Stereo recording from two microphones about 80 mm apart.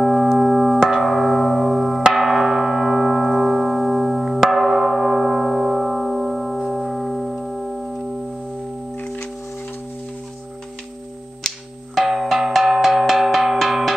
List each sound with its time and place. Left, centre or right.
0.0 s a sound: centre
8.9 s singing bowl: left
11.4 s music: centre
12.0 s cowbell: centre